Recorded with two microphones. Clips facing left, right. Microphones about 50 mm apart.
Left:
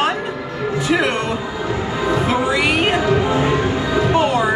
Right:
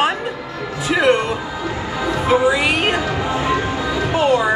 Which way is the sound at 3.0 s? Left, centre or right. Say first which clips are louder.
Left 4 dB; left.